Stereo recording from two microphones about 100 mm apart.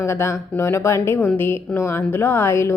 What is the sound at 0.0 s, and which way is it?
Speech, 30° left (ahead or behind).